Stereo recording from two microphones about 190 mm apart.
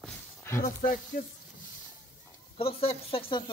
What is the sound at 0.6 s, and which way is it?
Speech, 45° left (ahead or behind).